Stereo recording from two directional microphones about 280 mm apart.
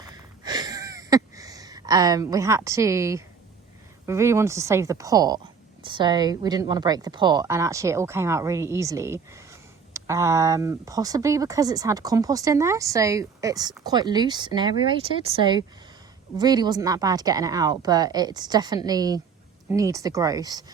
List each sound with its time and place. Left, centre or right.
0.0 s wheeze: centre
4.0 s a woman's voice: centre